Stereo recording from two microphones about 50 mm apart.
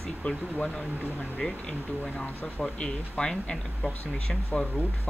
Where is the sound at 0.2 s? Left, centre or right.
Left.